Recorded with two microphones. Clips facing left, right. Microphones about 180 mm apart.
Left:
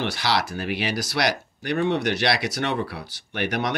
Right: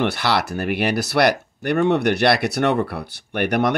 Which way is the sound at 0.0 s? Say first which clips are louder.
Right 4 dB; 55° right (ahead or behind).